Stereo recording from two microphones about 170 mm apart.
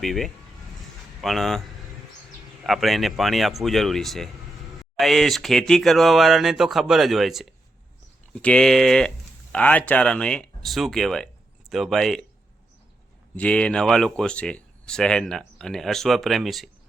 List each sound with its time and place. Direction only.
0.0 s speech: centre (ahead or behind)
2.6 s speech: centre (ahead or behind)
13.3 s speech: 5° left (ahead or behind)